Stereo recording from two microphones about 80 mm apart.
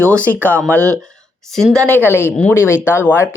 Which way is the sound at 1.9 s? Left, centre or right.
Left.